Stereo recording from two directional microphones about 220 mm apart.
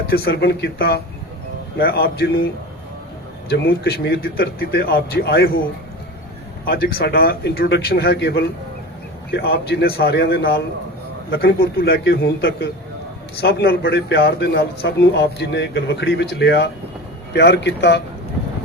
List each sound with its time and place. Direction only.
0.1 s a man's voice: 45° left (ahead or behind)
3.8 s a man's voice: 45° left (ahead or behind)
6.7 s a man's voice: 45° left (ahead or behind)